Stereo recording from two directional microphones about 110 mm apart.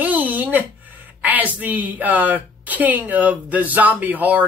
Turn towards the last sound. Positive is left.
turn(degrees=-15)  # may be behind; listen again after turning